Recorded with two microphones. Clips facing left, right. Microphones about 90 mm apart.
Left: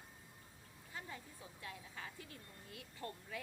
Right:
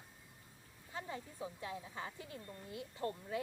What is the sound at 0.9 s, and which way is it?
Speech, 25° right (ahead or behind).